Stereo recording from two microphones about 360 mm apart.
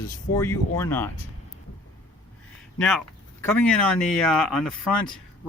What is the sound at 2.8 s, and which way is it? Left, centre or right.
Speech, centre.